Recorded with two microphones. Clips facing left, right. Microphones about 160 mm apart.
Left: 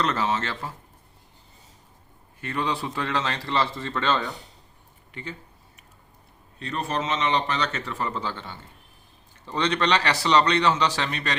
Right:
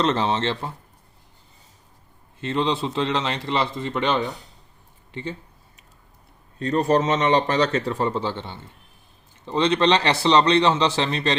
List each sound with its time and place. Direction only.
0.0 s a man's voice: 25° right (ahead or behind)
2.4 s a man's voice: 25° right (ahead or behind)
6.6 s a man's voice: 40° right (ahead or behind)